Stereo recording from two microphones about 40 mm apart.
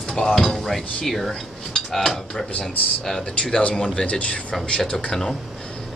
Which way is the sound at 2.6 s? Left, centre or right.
Centre.